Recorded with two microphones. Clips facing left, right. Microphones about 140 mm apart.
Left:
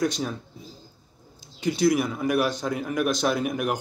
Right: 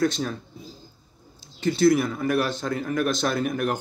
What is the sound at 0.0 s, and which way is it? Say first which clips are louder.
Speech: right 2 dB; 10° left (ahead or behind).